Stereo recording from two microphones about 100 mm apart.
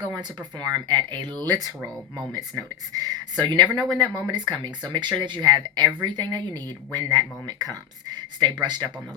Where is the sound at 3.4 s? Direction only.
50° right (ahead or behind).